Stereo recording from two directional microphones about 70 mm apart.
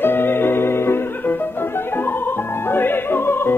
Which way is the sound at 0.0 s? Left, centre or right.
Left.